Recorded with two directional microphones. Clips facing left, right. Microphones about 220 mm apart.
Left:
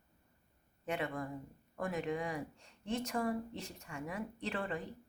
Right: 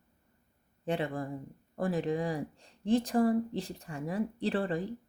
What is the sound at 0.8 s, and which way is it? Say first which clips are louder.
Speech: right 5 dB; 30° right (ahead or behind).